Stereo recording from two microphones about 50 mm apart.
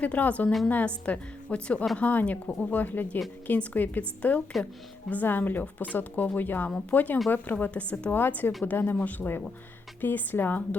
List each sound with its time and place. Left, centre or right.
0.0 s speech: left
2.5 s speech: left
2.7 s speech: left
8.1 s speech: left